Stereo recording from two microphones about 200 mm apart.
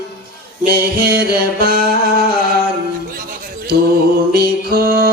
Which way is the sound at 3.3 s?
50° right (ahead or behind).